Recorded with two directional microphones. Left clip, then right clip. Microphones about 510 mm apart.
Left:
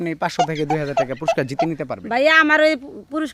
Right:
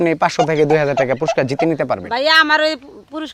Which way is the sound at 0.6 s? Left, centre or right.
Centre.